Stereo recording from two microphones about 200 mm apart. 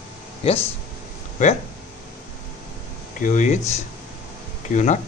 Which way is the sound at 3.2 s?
40° left (ahead or behind).